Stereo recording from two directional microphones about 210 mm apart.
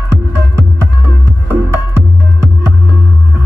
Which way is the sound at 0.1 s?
10° right (ahead or behind).